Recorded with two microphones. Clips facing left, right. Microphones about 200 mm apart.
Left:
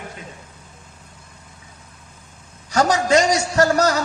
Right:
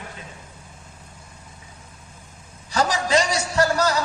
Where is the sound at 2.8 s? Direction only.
45° left (ahead or behind).